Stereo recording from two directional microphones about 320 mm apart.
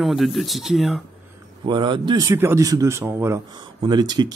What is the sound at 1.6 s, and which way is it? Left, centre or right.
A man's voice, centre.